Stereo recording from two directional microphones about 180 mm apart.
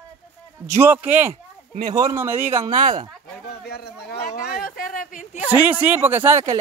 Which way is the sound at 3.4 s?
60° left (ahead or behind).